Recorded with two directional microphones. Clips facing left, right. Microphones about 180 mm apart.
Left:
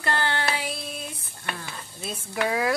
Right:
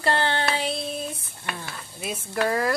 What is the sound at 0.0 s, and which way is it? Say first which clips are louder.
Child singing: right 3 dB; 25° right (ahead or behind).